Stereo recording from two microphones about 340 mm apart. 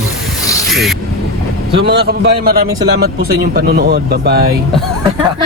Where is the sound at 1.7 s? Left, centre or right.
Right.